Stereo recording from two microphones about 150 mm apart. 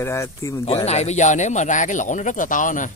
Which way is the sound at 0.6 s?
45° left (ahead or behind).